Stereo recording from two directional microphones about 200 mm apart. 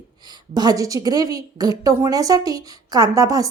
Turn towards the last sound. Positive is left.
turn(degrees=-15)  # may be behind; listen again after turning